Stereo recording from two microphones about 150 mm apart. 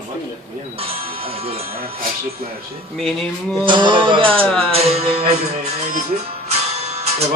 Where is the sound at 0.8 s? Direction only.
40° right (ahead or behind).